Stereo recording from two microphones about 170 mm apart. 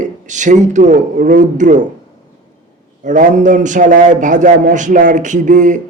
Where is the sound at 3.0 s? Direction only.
45° right (ahead or behind).